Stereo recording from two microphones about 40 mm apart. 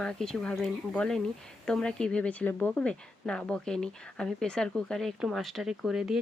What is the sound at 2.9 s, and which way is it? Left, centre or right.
Speech, left.